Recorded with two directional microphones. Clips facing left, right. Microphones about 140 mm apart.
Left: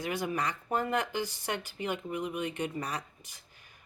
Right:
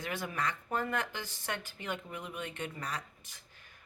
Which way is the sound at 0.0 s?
15° left (ahead or behind).